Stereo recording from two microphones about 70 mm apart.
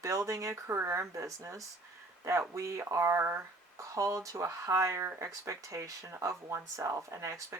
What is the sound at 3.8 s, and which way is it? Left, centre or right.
Speech, right.